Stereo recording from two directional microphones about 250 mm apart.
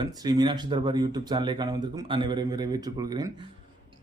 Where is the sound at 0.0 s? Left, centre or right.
Centre.